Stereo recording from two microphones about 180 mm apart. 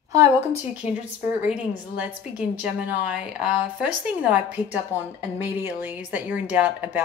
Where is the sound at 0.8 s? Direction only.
40° left (ahead or behind).